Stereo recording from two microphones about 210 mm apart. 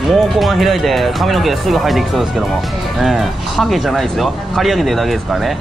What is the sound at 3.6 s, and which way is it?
Speech, centre (ahead or behind).